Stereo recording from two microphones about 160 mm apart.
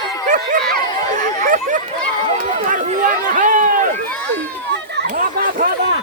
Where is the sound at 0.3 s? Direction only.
55° right (ahead or behind).